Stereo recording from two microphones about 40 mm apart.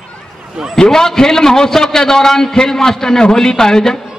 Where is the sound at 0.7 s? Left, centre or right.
Centre.